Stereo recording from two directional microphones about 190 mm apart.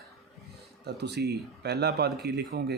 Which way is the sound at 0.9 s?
60° right (ahead or behind).